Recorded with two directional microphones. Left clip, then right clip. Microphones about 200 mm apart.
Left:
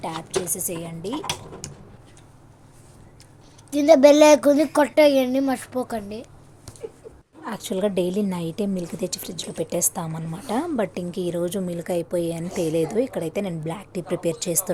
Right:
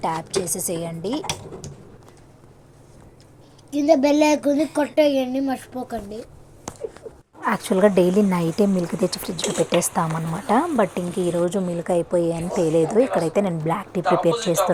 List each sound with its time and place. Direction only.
0.0 s speech: 30° right (ahead or behind)
1.6 s speech: 35° left (ahead or behind)
3.7 s speech: 40° left (ahead or behind)
7.4 s speech: 15° right (ahead or behind)
13.1 s a woman's voice: 50° right (ahead or behind)
13.3 s speech: 10° right (ahead or behind)
14.0 s a woman's voice: 45° right (ahead or behind)
14.3 s speech: 5° right (ahead or behind)